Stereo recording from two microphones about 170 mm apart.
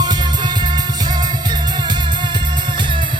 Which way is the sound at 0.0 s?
25° right (ahead or behind).